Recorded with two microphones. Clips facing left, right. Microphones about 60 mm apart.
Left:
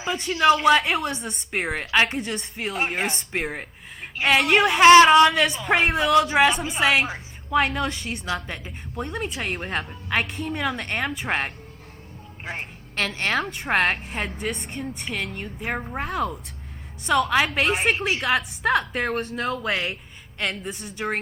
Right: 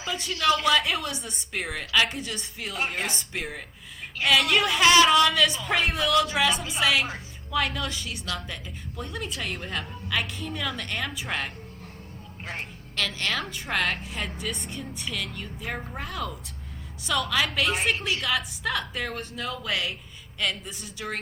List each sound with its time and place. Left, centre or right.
0.1 s a woman's voice: left
1.7 s a woman's voice: left
2.8 s speech: left
3.1 s speech: left
4.4 s a woman's voice: left
13.0 s speech: left
16.0 s a woman's voice: left
17.1 s a woman's voice: left